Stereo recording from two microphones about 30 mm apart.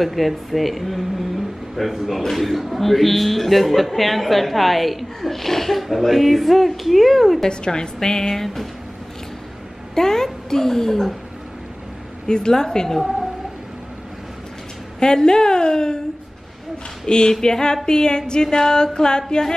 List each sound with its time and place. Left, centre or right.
0.0 s a man's voice: centre
7.4 s music: left
9.9 s a woman's voice: centre
12.3 s music: left
15.0 s music: left
17.0 s music: left